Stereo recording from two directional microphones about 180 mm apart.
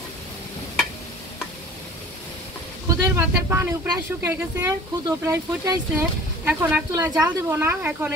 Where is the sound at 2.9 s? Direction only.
15° right (ahead or behind).